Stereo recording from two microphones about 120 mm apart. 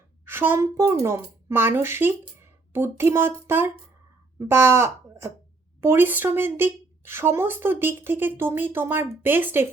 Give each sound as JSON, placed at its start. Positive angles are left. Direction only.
{"t": 0.3, "sound": "speech", "side_deg": -20}